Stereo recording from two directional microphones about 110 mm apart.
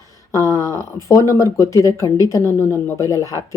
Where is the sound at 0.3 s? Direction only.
30° left (ahead or behind).